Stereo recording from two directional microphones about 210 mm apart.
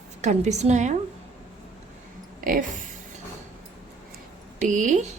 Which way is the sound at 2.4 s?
40° right (ahead or behind).